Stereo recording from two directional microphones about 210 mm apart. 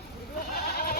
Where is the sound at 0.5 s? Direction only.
45° left (ahead or behind).